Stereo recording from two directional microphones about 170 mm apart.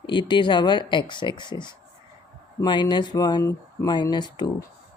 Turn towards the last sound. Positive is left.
turn(degrees=25)  # may be behind; listen again after turning